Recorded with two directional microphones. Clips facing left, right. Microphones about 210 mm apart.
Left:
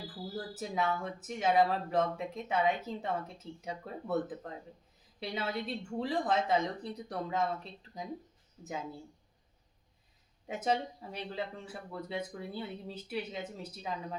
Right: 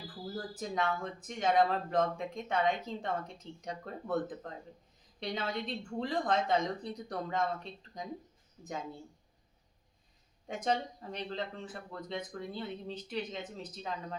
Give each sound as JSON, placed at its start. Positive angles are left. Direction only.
{"t": 0.3, "sound": "speech", "side_deg": 5}
{"t": 10.4, "sound": "speech", "side_deg": 5}